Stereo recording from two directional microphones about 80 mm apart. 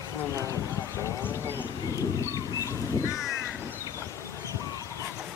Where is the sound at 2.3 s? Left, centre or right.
Left.